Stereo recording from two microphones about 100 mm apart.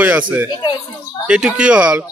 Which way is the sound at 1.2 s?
10° right (ahead or behind).